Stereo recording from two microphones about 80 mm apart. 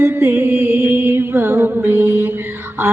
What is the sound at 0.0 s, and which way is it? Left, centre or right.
Music, right.